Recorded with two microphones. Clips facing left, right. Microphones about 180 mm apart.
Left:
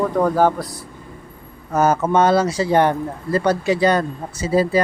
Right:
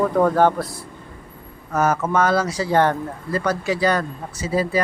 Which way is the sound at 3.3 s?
30° left (ahead or behind).